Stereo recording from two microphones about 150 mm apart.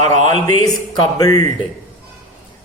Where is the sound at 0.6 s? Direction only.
25° left (ahead or behind).